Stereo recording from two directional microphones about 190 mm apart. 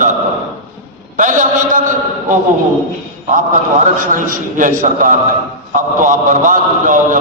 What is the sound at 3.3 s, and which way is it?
A man's voice, 40° right (ahead or behind).